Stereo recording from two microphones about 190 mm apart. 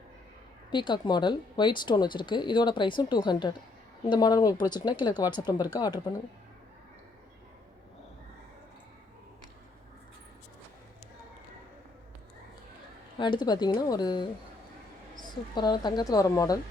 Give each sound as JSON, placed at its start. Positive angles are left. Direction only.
{"t": 0.7, "sound": "speech", "side_deg": 25}
{"t": 13.1, "sound": "speech", "side_deg": 25}
{"t": 15.3, "sound": "speech", "side_deg": 20}